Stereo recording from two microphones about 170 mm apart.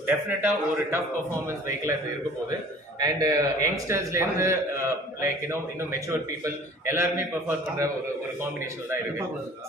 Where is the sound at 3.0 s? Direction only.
20° right (ahead or behind).